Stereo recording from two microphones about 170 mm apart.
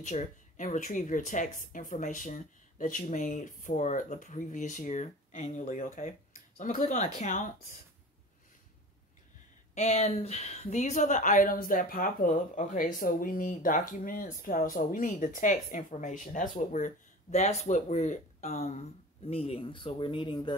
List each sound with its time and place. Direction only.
0.0 s a woman's voice: 45° left (ahead or behind)
9.8 s a woman's voice: 40° left (ahead or behind)